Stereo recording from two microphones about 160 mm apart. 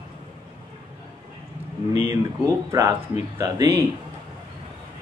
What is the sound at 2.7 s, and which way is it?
Speech, 20° right (ahead or behind).